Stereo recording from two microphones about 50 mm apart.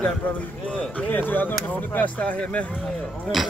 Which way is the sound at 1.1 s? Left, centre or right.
Left.